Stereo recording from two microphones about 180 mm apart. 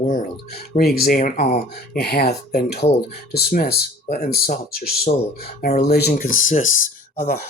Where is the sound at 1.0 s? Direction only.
50° left (ahead or behind).